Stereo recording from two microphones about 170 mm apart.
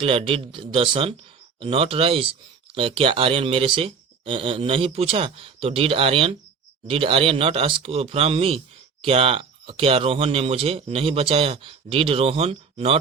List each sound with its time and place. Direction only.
0.0 s speech: 30° right (ahead or behind)